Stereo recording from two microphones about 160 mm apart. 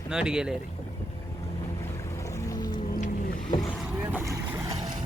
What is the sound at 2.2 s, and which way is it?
Music, 20° left (ahead or behind).